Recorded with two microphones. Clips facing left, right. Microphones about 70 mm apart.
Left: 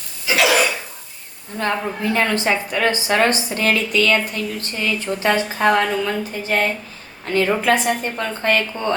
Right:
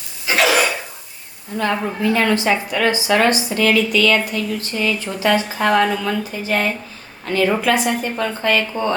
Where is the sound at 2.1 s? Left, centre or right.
Left.